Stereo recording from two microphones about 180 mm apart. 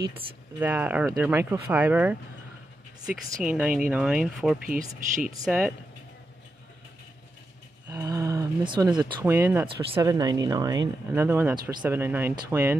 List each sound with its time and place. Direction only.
0.6 s speech: 10° right (ahead or behind)
3.4 s speech: 5° right (ahead or behind)
4.6 s speech: 50° right (ahead or behind)
5.4 s speech: 5° right (ahead or behind)
7.9 s a sound: 20° right (ahead or behind)
9.2 s speech: 10° right (ahead or behind)